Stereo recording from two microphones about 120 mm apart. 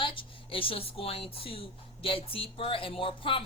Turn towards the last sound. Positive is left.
turn(degrees=50)  # may be behind; listen again after turning